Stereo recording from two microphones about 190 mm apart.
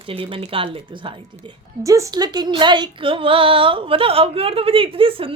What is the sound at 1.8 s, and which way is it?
Speech, 15° right (ahead or behind).